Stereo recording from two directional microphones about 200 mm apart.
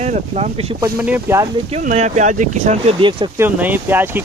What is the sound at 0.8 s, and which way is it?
Speech, 10° right (ahead or behind).